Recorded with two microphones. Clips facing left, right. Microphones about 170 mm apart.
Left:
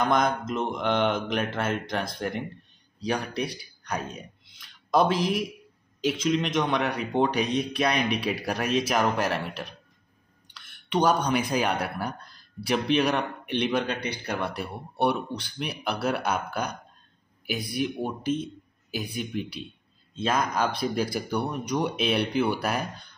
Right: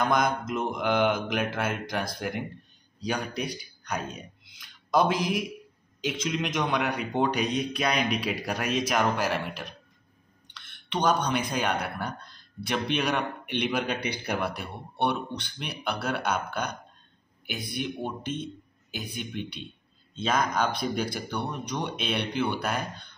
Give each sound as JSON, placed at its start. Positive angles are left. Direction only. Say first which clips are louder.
{"t": 0.1, "sound": "speech", "louder": "left 1 dB", "side_deg": -5}
{"t": 5.9, "sound": "a sound", "louder": "left 4 dB", "side_deg": 35}
{"t": 6.2, "sound": "speech", "louder": "left 3 dB", "side_deg": 0}
{"t": 11.0, "sound": "speech", "louder": "left 2 dB", "side_deg": 5}
{"t": 14.5, "sound": "speech", "louder": "left 3 dB", "side_deg": 5}